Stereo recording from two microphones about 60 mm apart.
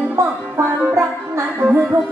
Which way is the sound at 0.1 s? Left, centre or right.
Right.